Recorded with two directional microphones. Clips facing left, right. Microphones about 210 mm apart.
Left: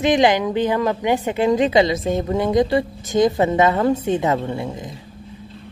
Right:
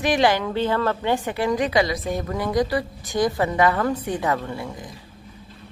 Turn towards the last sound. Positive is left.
turn(degrees=25)  # may be behind; listen again after turning